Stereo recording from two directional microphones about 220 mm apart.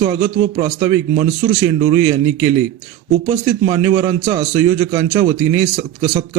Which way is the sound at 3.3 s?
20° right (ahead or behind).